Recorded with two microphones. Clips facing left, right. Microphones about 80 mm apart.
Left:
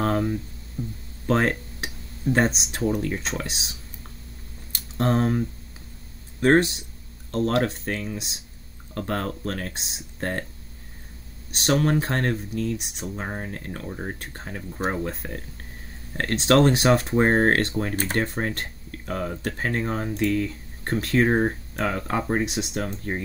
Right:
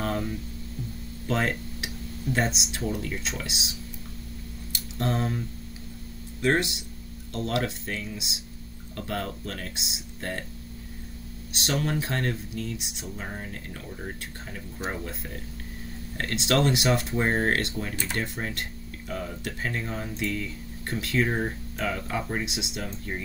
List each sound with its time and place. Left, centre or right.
0.0 s a sound: left
0.8 s speech: left
1.2 s speech: left
4.7 s speech: left
6.4 s speech: left
11.5 s speech: left